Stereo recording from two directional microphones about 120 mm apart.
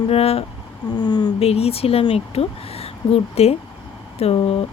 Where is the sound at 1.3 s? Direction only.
55° left (ahead or behind).